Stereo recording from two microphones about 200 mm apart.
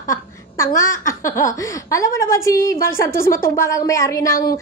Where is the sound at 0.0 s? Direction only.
15° left (ahead or behind).